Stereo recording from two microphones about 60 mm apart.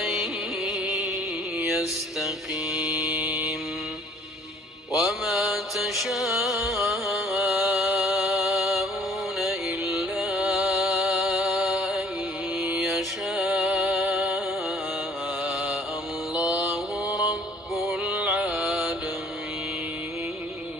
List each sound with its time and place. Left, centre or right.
0.0 s music: centre
2.7 s mantra: centre
4.9 s mantra: centre
8.0 s music: centre
16.3 s mantra: centre
18.0 s music: centre